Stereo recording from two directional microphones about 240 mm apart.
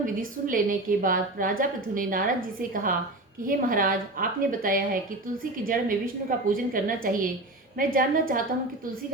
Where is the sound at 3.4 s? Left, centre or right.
Right.